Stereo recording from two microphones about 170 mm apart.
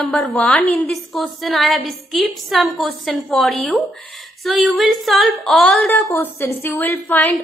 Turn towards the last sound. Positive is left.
turn(degrees=10)  # may be behind; listen again after turning